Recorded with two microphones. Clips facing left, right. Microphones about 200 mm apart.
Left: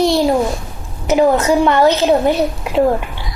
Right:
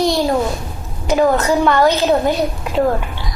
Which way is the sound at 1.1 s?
20° left (ahead or behind).